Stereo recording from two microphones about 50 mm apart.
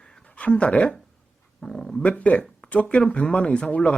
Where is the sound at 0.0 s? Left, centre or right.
Centre.